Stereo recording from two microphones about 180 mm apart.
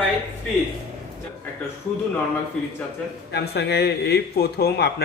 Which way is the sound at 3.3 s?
65° left (ahead or behind).